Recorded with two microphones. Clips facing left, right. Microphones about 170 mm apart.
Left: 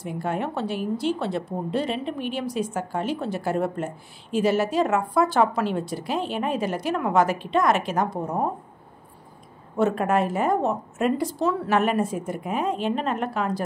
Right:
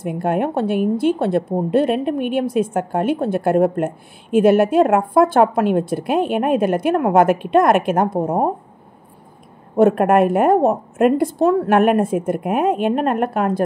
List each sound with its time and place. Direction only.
0.0 s a woman's voice: 55° right (ahead or behind)
9.8 s a woman's voice: 55° right (ahead or behind)